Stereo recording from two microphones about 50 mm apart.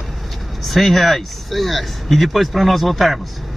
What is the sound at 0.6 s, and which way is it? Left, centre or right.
Speech, centre.